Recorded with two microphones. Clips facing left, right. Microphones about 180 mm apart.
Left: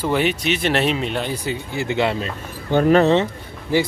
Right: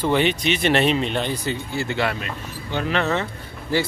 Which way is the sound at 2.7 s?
45° left (ahead or behind).